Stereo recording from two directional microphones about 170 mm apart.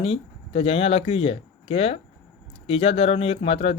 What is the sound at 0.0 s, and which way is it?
Speech, 35° left (ahead or behind).